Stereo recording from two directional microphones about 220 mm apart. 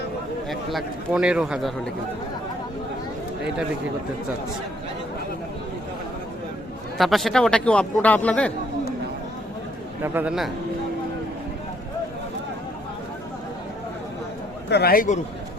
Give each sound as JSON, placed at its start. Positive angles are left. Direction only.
{"t": 0.5, "sound": "a man's voice", "side_deg": 0}
{"t": 7.0, "sound": "a man's voice", "side_deg": 0}
{"t": 10.0, "sound": "a man's voice", "side_deg": -5}
{"t": 14.7, "sound": "a man's voice", "side_deg": 45}